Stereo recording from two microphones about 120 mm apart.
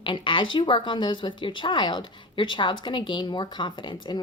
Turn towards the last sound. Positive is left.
turn(degrees=40)  # may be behind; listen again after turning